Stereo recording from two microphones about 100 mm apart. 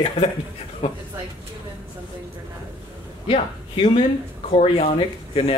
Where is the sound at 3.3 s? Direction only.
65° left (ahead or behind).